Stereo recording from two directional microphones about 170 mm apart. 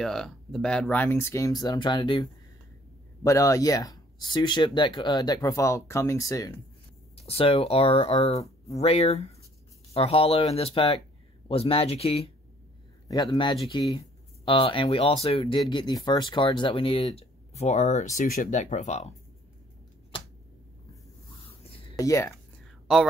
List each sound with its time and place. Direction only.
0.0 s speech: 5° left (ahead or behind); by 2.2 s 25° left (ahead or behind)
3.3 s speech: 20° left (ahead or behind)
7.2 s speech: 35° left (ahead or behind)
13.1 s speech: 25° left (ahead or behind); by 19.1 s 40° left (ahead or behind)
21.5 s a sound: 35° left (ahead or behind)
21.9 s speech: 20° left (ahead or behind)